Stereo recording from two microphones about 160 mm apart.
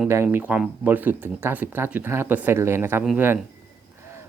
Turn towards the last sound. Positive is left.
turn(degrees=-10)  # may be behind; listen again after turning